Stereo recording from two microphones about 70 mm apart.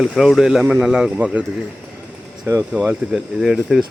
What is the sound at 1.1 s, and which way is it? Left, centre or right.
Mantra, centre.